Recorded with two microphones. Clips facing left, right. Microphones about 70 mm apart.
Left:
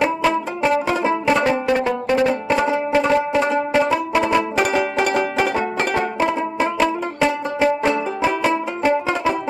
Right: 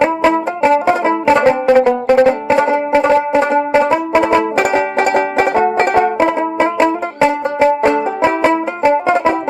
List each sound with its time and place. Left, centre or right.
0.0 s music: right